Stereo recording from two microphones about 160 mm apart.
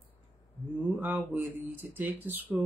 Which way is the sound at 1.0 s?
10° right (ahead or behind).